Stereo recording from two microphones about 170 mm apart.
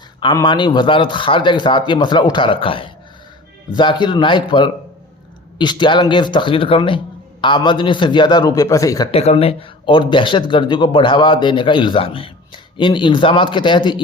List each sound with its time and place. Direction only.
0.3 s speech: 25° left (ahead or behind)
9.1 s speech: 35° left (ahead or behind)